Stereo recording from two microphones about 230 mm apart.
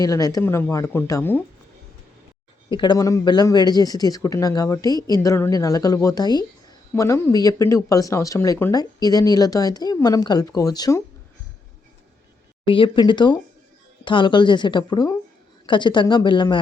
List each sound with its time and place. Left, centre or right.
0.0 s speech: centre
2.6 s speech: centre
12.6 s a woman's voice: left